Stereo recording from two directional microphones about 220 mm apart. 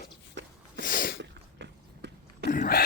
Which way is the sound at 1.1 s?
50° right (ahead or behind).